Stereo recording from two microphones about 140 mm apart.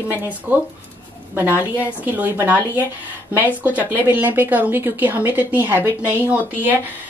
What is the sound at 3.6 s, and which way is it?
Speech, 10° right (ahead or behind).